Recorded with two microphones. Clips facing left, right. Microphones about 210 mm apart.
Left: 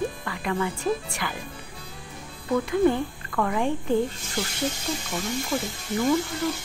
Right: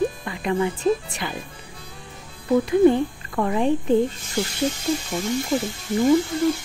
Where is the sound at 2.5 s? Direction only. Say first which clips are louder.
Right 5 dB; 20° right (ahead or behind).